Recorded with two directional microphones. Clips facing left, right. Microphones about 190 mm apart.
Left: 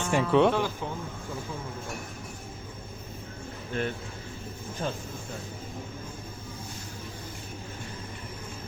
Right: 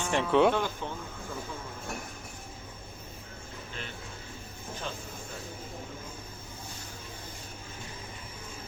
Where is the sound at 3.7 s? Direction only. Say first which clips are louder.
Left 14 dB; 55° left (ahead or behind).